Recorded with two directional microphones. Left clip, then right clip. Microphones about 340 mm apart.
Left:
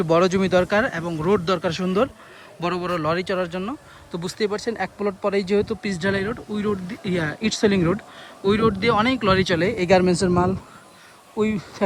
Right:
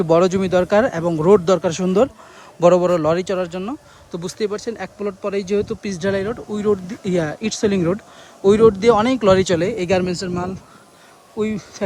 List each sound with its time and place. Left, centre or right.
0.0 s speech: centre